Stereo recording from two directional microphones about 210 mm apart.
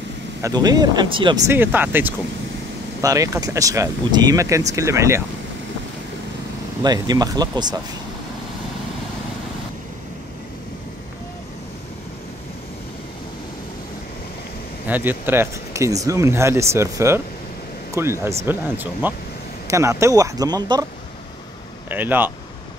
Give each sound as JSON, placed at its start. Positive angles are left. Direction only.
{"t": 0.4, "sound": "speech", "side_deg": -20}
{"t": 1.5, "sound": "speech", "side_deg": -10}
{"t": 6.8, "sound": "speech", "side_deg": -20}
{"t": 14.9, "sound": "speech", "side_deg": -10}
{"t": 21.9, "sound": "speech", "side_deg": -10}